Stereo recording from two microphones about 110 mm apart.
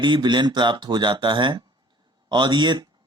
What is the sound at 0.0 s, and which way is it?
Speech, 45° right (ahead or behind).